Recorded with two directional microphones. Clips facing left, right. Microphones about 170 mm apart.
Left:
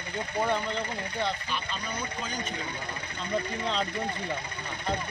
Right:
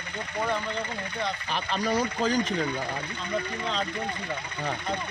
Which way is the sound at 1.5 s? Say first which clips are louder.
Right 7 dB; 85° right.